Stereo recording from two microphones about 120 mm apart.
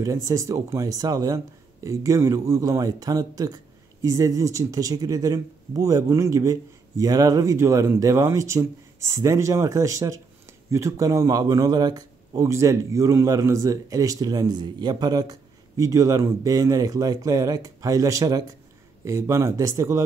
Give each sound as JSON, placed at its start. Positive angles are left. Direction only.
{"t": 0.0, "sound": "speech", "side_deg": -25}